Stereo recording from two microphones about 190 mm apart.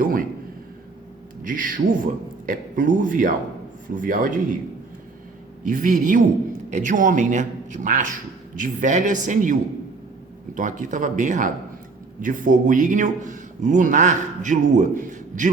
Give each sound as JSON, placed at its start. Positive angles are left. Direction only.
{"t": 0.0, "sound": "a sound", "side_deg": -45}
{"t": 1.5, "sound": "speech", "side_deg": -45}
{"t": 5.6, "sound": "a man's voice", "side_deg": -45}